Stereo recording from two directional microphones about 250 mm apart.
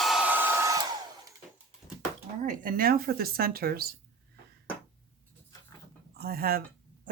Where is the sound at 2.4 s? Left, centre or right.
Right.